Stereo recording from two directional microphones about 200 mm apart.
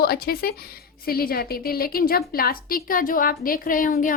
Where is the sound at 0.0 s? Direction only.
50° left (ahead or behind).